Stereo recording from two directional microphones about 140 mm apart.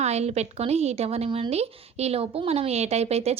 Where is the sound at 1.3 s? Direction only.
35° right (ahead or behind).